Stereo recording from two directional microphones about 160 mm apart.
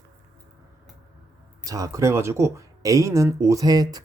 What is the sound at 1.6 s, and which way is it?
Speech, 20° right (ahead or behind).